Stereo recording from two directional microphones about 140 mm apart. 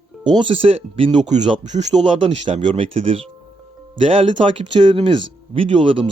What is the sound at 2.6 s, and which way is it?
Speech, 40° right (ahead or behind).